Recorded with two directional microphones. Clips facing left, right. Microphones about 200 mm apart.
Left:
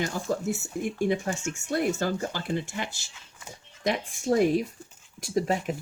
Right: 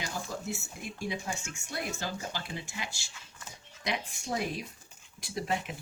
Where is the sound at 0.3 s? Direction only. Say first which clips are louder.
Left 9 dB; 50° left (ahead or behind).